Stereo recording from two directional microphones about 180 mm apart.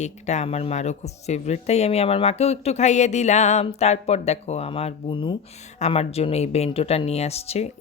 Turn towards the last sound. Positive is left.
turn(degrees=35)  # may be behind; listen again after turning